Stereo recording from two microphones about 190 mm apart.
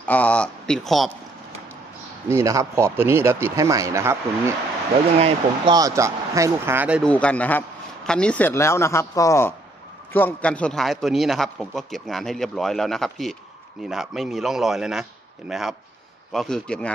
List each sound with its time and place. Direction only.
0.0 s a man's voice: 5° left (ahead or behind)
2.2 s speech: 15° right (ahead or behind)
7.0 s a man's voice: 5° left (ahead or behind)